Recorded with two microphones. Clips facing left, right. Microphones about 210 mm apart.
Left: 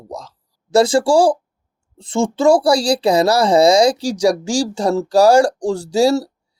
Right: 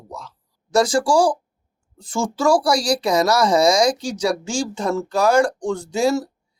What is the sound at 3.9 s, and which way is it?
Speech, 70° left (ahead or behind).